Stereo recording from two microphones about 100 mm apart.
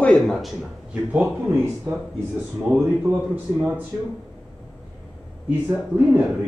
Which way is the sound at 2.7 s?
10° right (ahead or behind).